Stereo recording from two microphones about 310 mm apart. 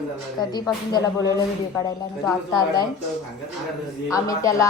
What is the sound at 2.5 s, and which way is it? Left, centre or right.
Speech, centre.